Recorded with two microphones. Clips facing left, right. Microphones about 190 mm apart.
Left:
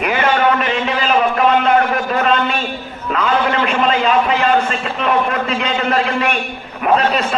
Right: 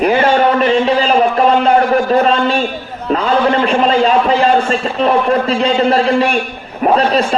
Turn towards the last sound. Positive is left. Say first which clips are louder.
# right 3 dB
turn(degrees=-35)  # may be behind; listen again after turning